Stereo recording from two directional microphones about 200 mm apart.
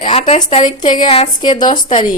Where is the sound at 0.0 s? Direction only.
30° left (ahead or behind).